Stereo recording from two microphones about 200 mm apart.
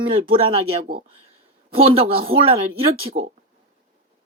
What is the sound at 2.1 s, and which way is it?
Speech, 25° right (ahead or behind).